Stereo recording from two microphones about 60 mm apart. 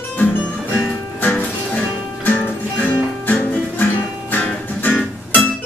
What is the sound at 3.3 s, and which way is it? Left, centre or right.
Music, left.